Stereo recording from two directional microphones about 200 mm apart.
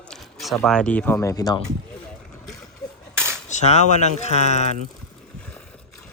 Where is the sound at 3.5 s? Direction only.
35° left (ahead or behind).